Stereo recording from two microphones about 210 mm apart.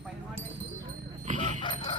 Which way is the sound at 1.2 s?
35° right (ahead or behind).